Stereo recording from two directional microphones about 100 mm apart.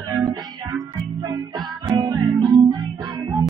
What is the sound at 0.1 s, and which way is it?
Music, 40° right (ahead or behind).